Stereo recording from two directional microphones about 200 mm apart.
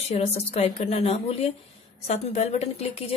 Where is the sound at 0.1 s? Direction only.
30° left (ahead or behind).